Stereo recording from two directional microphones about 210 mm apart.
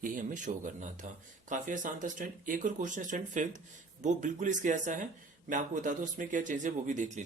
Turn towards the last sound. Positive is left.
turn(degrees=-35)  # may be behind; listen again after turning